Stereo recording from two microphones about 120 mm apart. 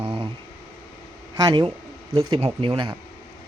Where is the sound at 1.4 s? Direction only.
30° right (ahead or behind).